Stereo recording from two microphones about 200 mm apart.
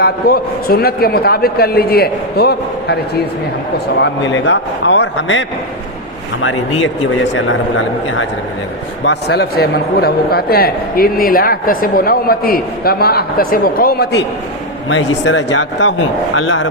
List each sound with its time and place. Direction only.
0.0 s a man's voice: 50° left (ahead or behind)
4.0 s speech: 65° left (ahead or behind)
9.0 s a man's voice: 55° left (ahead or behind)
14.8 s speech: 65° left (ahead or behind)